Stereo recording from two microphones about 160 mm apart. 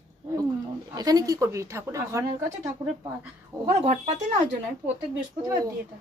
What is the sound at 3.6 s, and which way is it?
Speech, 45° right (ahead or behind).